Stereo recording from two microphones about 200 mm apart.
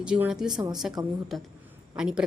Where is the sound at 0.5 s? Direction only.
20° right (ahead or behind).